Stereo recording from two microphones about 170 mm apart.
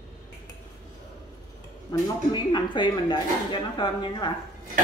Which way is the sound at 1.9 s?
25° left (ahead or behind).